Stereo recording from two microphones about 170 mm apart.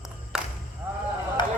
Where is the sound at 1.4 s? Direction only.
25° left (ahead or behind).